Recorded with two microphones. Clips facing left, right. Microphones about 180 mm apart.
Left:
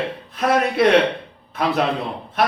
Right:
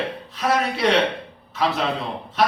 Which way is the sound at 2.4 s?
55° left (ahead or behind).